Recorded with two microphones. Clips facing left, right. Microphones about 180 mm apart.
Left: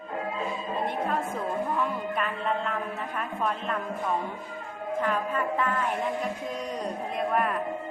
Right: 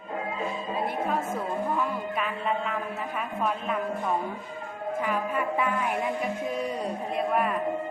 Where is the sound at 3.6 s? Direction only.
5° right (ahead or behind).